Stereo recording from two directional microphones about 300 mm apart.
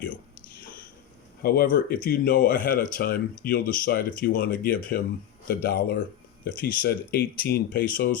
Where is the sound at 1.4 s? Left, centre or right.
Left.